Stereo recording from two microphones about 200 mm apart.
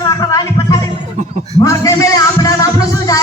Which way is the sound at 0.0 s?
15° left (ahead or behind).